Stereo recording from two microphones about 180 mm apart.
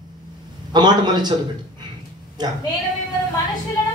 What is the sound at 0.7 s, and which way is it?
Speech, 25° right (ahead or behind).